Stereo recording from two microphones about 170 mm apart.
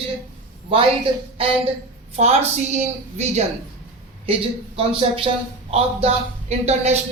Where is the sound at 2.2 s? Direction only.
40° right (ahead or behind).